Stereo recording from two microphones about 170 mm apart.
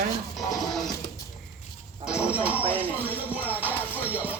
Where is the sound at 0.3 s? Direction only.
Centre (ahead or behind).